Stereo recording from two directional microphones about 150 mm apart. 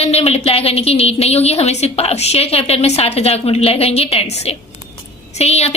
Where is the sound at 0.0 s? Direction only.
45° left (ahead or behind).